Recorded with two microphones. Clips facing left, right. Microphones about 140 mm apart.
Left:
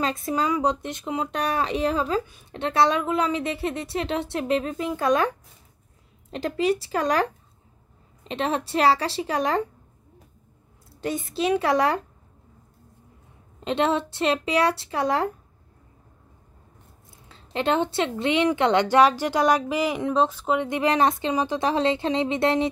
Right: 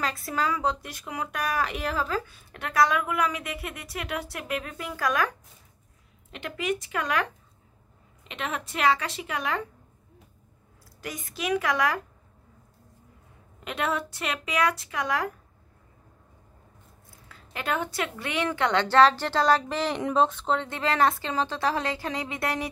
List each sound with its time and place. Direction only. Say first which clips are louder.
0.0 s speech: left 4 dB; 20° left (ahead or behind)
6.3 s speech: left 7 dB; 35° left (ahead or behind)
11.0 s speech: left 9 dB; 30° left (ahead or behind)
13.6 s speech: left 6 dB; 25° left (ahead or behind)
17.3 s speech: left 7 dB; 25° left (ahead or behind); by 20.5 s centre (ahead or behind)
20.5 s speech: left 8 dB; 15° left (ahead or behind)